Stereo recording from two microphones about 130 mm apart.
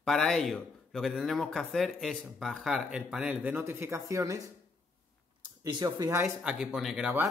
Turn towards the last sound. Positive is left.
turn(degrees=0)  # may be behind; listen again after turning